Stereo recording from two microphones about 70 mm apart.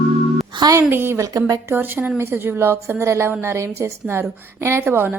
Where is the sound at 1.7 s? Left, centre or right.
Right.